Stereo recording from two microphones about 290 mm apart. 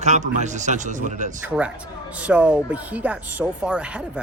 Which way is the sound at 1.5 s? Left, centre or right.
Centre.